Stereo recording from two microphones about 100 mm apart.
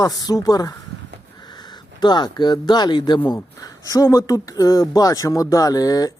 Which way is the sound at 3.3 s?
35° left (ahead or behind).